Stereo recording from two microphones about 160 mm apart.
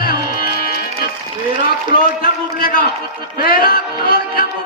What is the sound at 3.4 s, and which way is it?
Music, 70° left (ahead or behind).